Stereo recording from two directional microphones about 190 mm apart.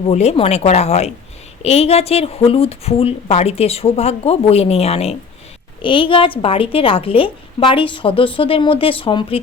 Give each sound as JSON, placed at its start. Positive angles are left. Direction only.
{"t": 0.0, "sound": "a woman's voice", "side_deg": 35}